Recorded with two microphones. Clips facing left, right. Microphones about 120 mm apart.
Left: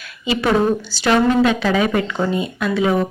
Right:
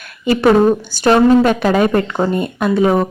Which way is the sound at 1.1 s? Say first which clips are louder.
Right 4 dB; 40° right (ahead or behind).